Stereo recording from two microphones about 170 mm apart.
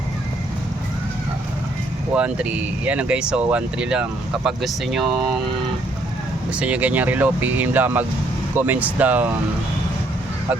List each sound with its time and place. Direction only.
2.1 s speech: 5° right (ahead or behind)
6.5 s speech: 5° right (ahead or behind)